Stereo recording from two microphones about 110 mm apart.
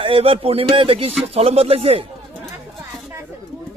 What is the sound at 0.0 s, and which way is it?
Speech, 55° right (ahead or behind).